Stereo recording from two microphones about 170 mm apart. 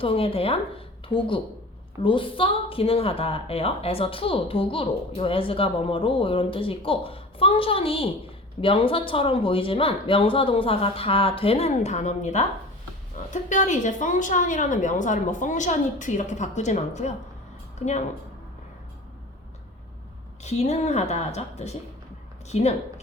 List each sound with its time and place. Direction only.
0.0 s a woman's voice: 35° left (ahead or behind)
20.4 s a woman's voice: 40° left (ahead or behind)